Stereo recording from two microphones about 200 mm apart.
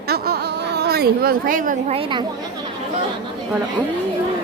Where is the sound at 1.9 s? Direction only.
25° right (ahead or behind).